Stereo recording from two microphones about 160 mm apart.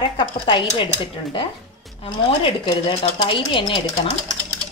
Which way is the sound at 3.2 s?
30° left (ahead or behind).